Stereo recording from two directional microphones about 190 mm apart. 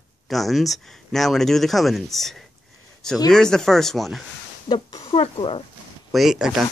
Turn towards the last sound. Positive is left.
turn(degrees=-5)  # may be behind; listen again after turning